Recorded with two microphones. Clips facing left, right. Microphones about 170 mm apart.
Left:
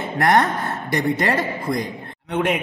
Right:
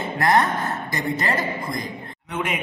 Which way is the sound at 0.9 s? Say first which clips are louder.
Left 6 dB; 65° left (ahead or behind).